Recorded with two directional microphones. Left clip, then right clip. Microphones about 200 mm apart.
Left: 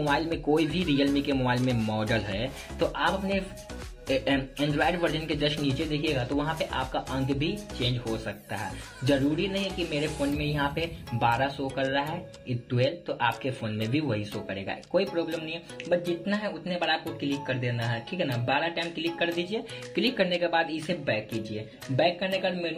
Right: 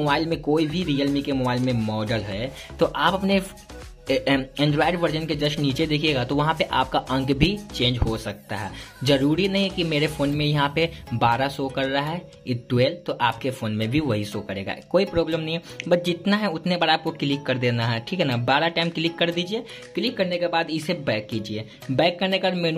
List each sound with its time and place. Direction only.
0.1 s speech: 15° right (ahead or behind)
8.1 s speech: 20° right (ahead or behind)
9.0 s speech: 30° right (ahead or behind)
20.0 s speech: 10° right (ahead or behind)
20.7 s speech: 30° right (ahead or behind)